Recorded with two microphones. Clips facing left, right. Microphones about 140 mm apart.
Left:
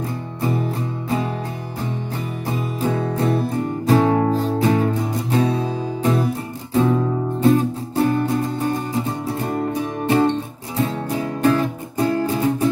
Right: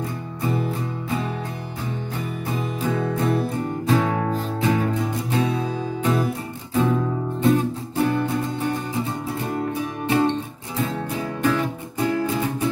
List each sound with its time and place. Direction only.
0.4 s music: 35° left (ahead or behind)
2.8 s music: 35° left (ahead or behind)
9.7 s music: 35° left (ahead or behind)
11.4 s music: 35° left (ahead or behind)